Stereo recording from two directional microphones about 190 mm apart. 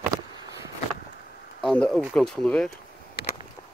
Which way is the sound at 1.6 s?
5° left (ahead or behind).